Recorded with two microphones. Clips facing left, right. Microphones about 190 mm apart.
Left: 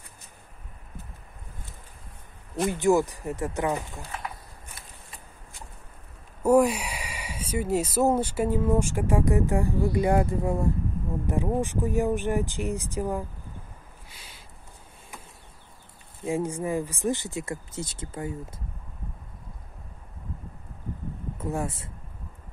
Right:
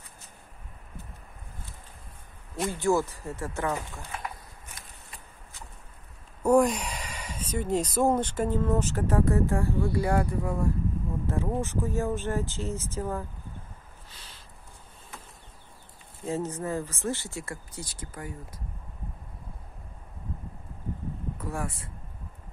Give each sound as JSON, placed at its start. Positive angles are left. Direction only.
{"t": 2.7, "sound": "speech", "side_deg": 15}
{"t": 6.4, "sound": "speech", "side_deg": 5}
{"t": 14.1, "sound": "a sound", "side_deg": 10}
{"t": 16.3, "sound": "speech", "side_deg": 10}
{"t": 21.4, "sound": "speech", "side_deg": 25}